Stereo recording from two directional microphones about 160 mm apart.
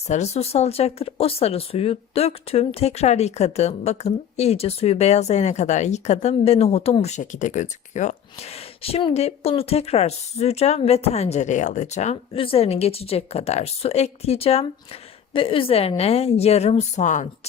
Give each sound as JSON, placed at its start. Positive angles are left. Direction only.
{"t": 0.1, "sound": "speech", "side_deg": 45}